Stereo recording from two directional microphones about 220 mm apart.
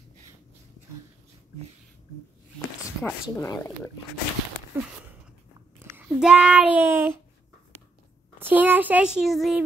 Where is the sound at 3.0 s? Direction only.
5° left (ahead or behind).